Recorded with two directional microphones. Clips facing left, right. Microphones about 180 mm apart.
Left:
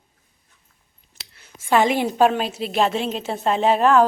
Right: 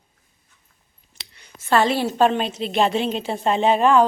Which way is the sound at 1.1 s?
5° left (ahead or behind).